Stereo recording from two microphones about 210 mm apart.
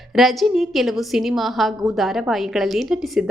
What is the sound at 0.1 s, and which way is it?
A woman's voice, centre (ahead or behind).